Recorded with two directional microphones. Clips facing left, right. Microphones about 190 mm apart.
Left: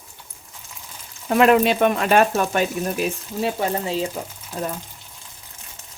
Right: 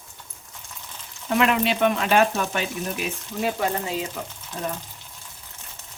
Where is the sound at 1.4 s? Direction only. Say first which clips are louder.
Left 6 dB; 45° left (ahead or behind).